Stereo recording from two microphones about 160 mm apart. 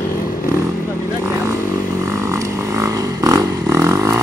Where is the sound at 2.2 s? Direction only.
20° right (ahead or behind).